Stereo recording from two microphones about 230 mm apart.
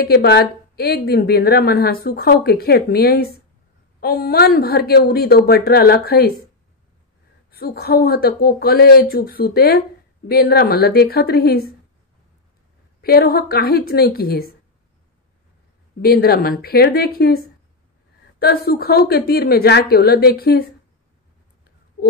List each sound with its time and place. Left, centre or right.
0.0 s a woman's voice: left
7.5 s speech: left
13.0 s speech: left
16.0 s speech: left
18.4 s a woman's voice: left